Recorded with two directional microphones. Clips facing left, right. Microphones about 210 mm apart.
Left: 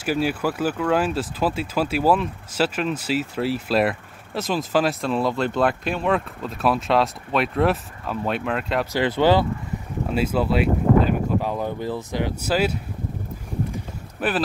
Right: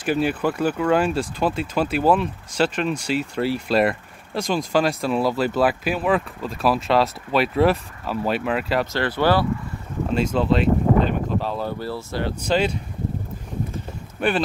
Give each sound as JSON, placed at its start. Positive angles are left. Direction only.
{"t": 0.0, "sound": "speech", "side_deg": 5}
{"t": 8.9, "sound": "speech", "side_deg": 15}
{"t": 10.1, "sound": "speech", "side_deg": 5}
{"t": 14.2, "sound": "speech", "side_deg": 5}